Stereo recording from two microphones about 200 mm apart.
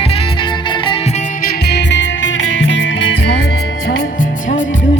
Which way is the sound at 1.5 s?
55° left (ahead or behind).